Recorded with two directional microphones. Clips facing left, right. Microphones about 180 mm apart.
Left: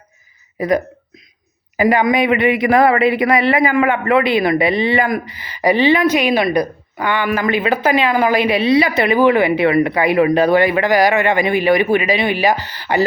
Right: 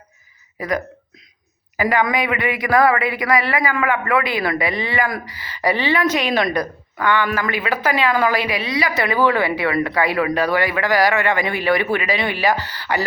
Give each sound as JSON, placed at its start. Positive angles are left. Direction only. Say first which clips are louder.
{"t": 1.7, "sound": "speech", "louder": "left 5 dB", "side_deg": 20}